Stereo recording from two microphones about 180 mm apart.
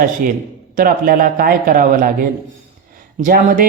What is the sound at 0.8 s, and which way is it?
Speech, 50° right (ahead or behind).